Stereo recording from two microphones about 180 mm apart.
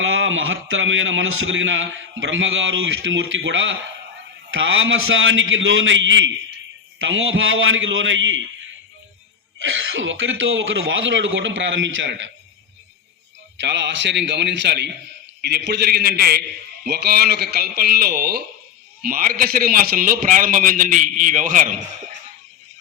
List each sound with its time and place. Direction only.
0.0 s a man's voice: 90° right
9.6 s a man's voice: 90° right
13.6 s a man's voice: 75° right (ahead or behind); by 21.8 s 45° right (ahead or behind)